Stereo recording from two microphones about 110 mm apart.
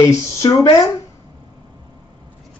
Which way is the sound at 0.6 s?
35° left (ahead or behind).